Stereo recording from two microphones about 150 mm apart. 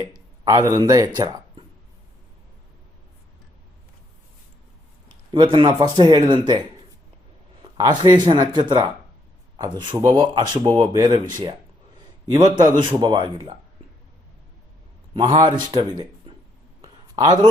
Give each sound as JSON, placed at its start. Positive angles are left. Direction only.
{"t": 0.4, "sound": "speech", "side_deg": -25}
{"t": 5.0, "sound": "speech", "side_deg": -30}
{"t": 15.1, "sound": "speech", "side_deg": -30}
{"t": 16.8, "sound": "a sound", "side_deg": -25}